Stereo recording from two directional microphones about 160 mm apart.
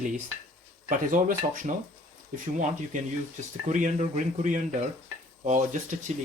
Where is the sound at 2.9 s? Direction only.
55° right (ahead or behind).